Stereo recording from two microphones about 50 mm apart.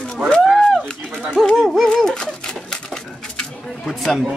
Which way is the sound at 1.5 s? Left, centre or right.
Centre.